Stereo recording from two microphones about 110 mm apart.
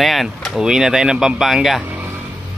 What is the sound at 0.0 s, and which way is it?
Speech, centre (ahead or behind).